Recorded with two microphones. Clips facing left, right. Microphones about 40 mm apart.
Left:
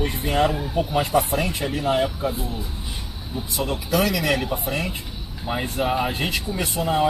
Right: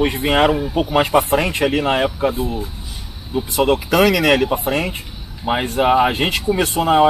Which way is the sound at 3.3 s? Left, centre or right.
Right.